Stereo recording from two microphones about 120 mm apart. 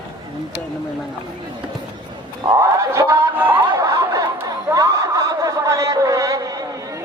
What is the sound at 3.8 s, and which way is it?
Snicker, 30° right (ahead or behind).